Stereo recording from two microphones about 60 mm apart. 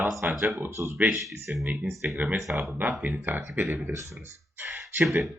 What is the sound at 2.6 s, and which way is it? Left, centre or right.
Speech, right.